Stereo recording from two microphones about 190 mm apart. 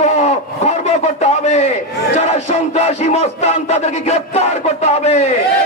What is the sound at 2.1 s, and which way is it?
Music, 35° left (ahead or behind).